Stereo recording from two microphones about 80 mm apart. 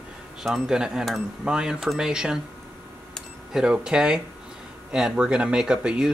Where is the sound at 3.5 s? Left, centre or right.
Centre.